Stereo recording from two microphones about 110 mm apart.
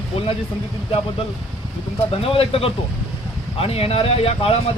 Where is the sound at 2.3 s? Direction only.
60° left (ahead or behind).